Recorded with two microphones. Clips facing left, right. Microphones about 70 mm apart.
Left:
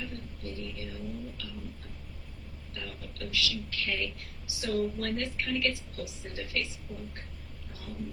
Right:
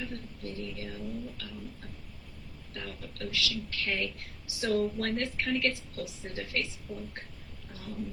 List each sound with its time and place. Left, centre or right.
0.0 s vehicle: right
2.7 s a man's voice: right
6.9 s speech: left
7.7 s a sound: right